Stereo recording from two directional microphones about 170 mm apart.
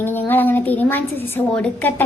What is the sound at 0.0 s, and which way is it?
A woman's voice, 10° left (ahead or behind).